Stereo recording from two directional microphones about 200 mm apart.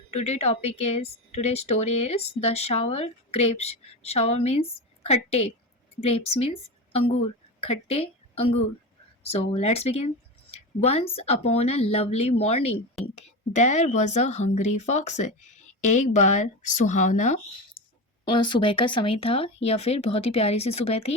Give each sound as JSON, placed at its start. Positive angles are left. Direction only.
{"t": 0.1, "sound": "a woman's voice", "side_deg": 35}
{"t": 18.3, "sound": "a woman's voice", "side_deg": 25}